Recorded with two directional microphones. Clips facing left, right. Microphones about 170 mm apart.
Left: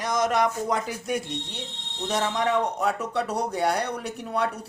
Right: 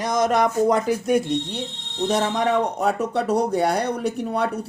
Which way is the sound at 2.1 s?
40° right (ahead or behind).